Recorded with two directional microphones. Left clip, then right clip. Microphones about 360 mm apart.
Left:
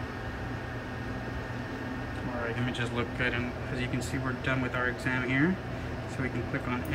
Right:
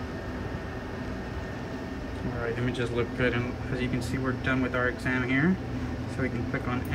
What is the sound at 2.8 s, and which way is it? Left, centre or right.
Speech, centre.